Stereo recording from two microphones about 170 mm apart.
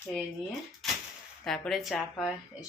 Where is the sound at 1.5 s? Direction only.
5° left (ahead or behind).